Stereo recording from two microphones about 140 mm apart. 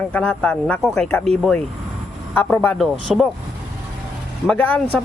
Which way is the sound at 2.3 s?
10° left (ahead or behind).